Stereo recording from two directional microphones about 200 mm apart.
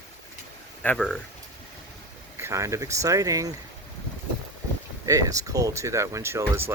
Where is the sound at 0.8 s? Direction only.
5° left (ahead or behind).